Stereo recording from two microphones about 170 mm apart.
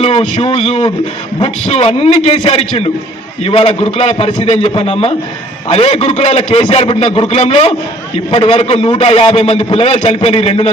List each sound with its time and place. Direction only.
0.0 s a man's voice: 35° left (ahead or behind)